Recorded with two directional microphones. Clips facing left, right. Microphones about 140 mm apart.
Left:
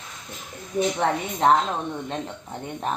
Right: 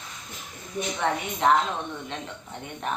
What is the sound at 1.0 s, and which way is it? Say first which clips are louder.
Speech: left 1 dB; 35° left (ahead or behind).